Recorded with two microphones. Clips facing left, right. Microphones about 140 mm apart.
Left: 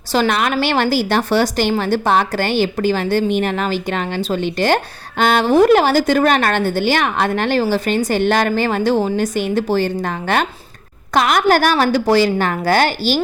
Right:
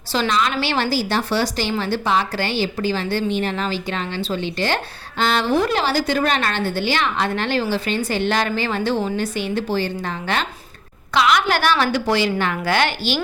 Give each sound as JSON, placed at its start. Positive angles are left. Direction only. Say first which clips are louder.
{"t": 0.1, "sound": "a woman's voice", "louder": "left 4 dB", "side_deg": 50}